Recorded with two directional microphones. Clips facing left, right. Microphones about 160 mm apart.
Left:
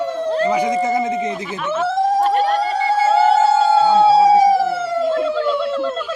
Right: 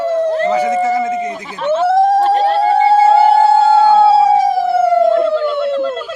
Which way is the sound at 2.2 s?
30° right (ahead or behind).